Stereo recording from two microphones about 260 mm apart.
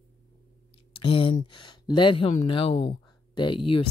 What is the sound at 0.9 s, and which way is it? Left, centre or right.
Speech, centre.